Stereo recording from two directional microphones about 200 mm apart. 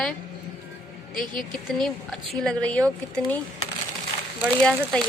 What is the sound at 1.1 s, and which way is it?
Speech, 45° left (ahead or behind).